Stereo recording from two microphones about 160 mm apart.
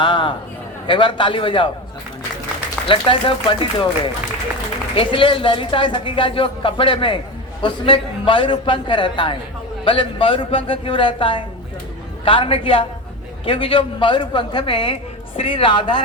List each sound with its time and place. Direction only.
0.0 s a man's voice: 30° left (ahead or behind)
2.8 s speech: 35° left (ahead or behind)